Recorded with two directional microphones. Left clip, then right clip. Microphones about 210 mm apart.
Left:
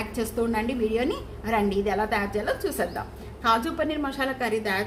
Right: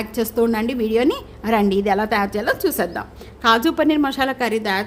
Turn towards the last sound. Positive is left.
turn(degrees=-50)  # may be behind; listen again after turning